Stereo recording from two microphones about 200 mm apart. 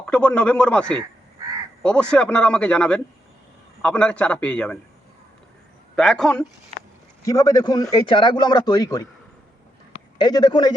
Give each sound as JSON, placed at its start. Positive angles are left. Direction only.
{"t": 0.0, "sound": "a man's voice", "side_deg": 5}
{"t": 6.0, "sound": "a man's voice", "side_deg": 0}
{"t": 7.3, "sound": "a man's voice", "side_deg": 20}
{"t": 10.2, "sound": "a man's voice", "side_deg": 20}